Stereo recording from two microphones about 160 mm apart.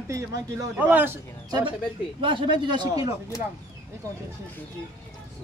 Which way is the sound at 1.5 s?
25° right (ahead or behind).